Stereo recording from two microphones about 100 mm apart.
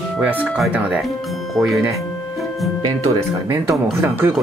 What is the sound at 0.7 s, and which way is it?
Speech, 15° right (ahead or behind).